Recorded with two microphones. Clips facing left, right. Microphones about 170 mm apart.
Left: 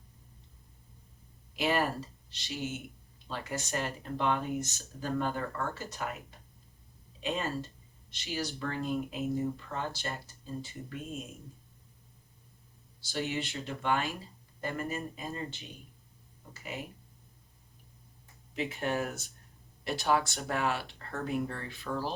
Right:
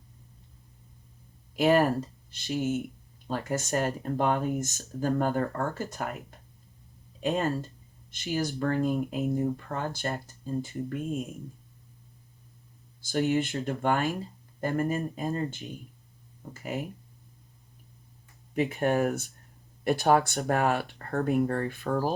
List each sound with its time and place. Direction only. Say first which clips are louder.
1.5 s speech: right 8 dB; 45° right (ahead or behind)
7.2 s speech: right 6 dB; 45° right (ahead or behind)
13.0 s speech: right 8 dB; 50° right (ahead or behind)
18.5 s speech: right 7 dB; 50° right (ahead or behind)